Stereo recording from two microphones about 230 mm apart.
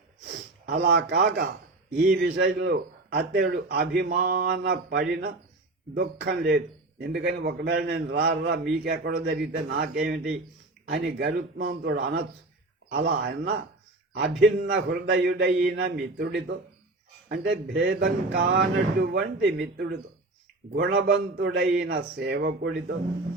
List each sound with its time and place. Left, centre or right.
0.8 s a man's voice: right